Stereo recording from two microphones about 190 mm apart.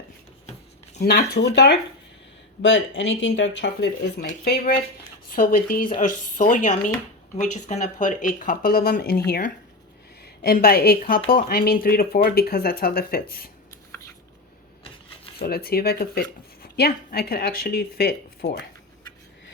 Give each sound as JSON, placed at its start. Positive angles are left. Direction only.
{"t": 1.0, "sound": "speech", "side_deg": 60}
{"t": 2.6, "sound": "speech", "side_deg": 85}
{"t": 4.3, "sound": "speech", "side_deg": 45}
{"t": 10.4, "sound": "speech", "side_deg": 50}
{"t": 15.4, "sound": "speech", "side_deg": 55}